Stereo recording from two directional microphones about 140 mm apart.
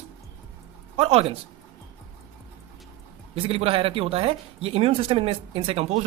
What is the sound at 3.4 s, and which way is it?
Speech, 40° right (ahead or behind).